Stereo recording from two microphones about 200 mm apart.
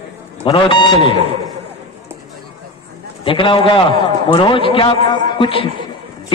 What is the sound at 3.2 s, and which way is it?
A man's voice, 25° left (ahead or behind).